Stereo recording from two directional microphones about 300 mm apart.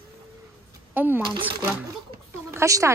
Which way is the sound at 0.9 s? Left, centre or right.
Centre.